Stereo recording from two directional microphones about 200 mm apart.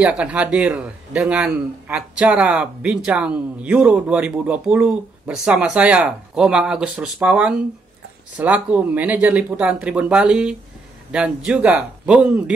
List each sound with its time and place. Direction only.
0.0 s a man's voice: 5° right (ahead or behind)